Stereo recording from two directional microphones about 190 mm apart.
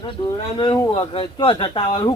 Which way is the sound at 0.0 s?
25° left (ahead or behind).